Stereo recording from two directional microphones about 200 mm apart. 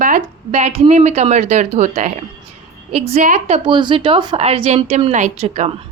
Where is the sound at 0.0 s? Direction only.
40° right (ahead or behind).